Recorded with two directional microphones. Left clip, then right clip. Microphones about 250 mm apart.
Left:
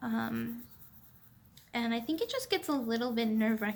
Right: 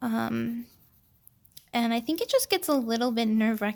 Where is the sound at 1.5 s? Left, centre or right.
Right.